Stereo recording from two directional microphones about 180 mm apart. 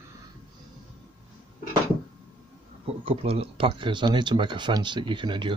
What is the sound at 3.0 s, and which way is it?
Speech, 35° right (ahead or behind).